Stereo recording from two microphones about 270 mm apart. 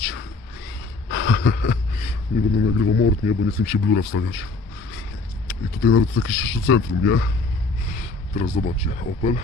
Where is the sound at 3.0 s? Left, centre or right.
Left.